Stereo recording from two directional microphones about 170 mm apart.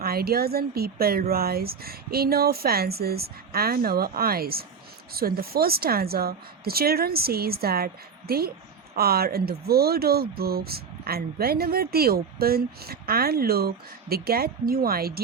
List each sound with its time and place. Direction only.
0.0 s speech: 65° right (ahead or behind)